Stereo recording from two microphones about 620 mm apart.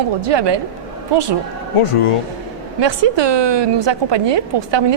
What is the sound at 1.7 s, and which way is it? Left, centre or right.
Speech, left.